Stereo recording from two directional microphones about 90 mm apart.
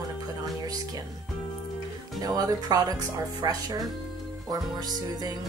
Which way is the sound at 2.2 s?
45° right (ahead or behind).